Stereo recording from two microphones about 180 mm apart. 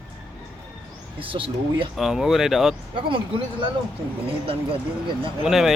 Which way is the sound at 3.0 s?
30° right (ahead or behind).